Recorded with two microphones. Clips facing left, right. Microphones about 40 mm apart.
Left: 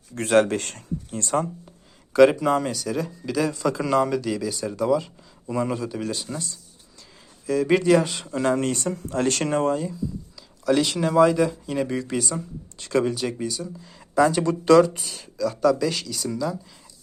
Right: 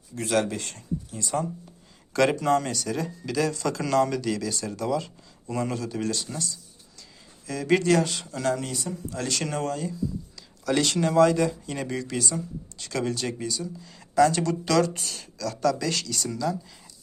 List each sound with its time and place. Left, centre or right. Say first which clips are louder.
0.1 s speech: left 6 dB; left
2.1 s speech: left 5 dB; centre
7.4 s speech: left 3 dB; centre
8.2 s speech: left 4 dB; left
8.5 s speech: left 7 dB; left
9.6 s speech: left 6 dB; centre
10.7 s speech: left 3 dB; centre
12.8 s speech: left 7 dB; left
13.1 s speech: left 3 dB; centre; by 14.8 s left
14.8 s speech: left 1 dB; centre